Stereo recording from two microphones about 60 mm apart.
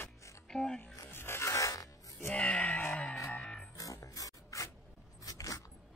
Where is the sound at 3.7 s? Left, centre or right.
Left.